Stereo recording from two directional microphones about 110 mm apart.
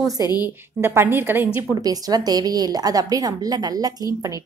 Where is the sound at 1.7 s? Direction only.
35° right (ahead or behind).